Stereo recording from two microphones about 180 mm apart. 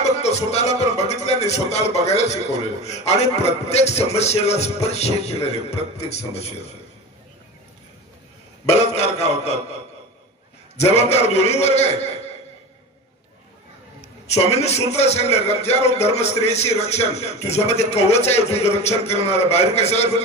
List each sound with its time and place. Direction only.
0.0 s music: 35° left (ahead or behind)
3.6 s speech: 35° left (ahead or behind)
8.9 s mantra: 35° left (ahead or behind)
11.0 s speech: 35° left (ahead or behind)
14.2 s speech: 35° left (ahead or behind)